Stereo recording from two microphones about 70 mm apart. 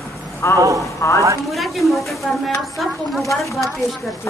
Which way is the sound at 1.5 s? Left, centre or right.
Centre.